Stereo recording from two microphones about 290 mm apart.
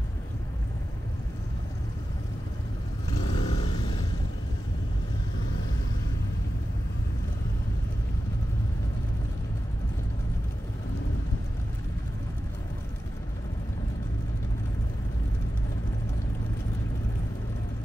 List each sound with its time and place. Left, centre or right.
3.1 s vehicle: centre